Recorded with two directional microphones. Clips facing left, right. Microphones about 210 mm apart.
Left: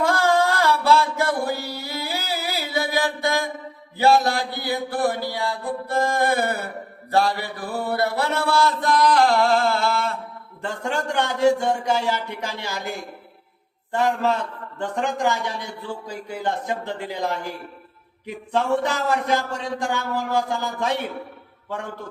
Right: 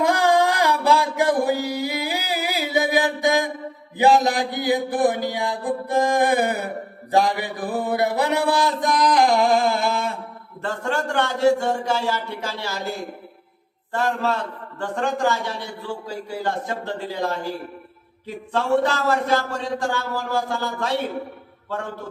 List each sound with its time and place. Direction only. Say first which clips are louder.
0.0 s a sound: right 1 dB; 15° right (ahead or behind)
3.9 s mantra: right 1 dB; 15° right (ahead or behind)
10.6 s speech: right 1 dB; 15° left (ahead or behind)
13.9 s speech: left 1 dB; 15° left (ahead or behind)